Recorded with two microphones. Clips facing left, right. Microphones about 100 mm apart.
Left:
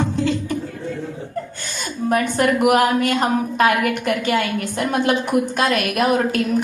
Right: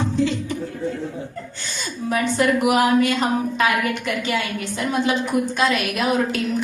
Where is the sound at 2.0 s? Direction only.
50° left (ahead or behind).